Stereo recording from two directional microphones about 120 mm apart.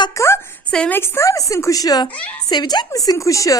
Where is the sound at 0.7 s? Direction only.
10° left (ahead or behind).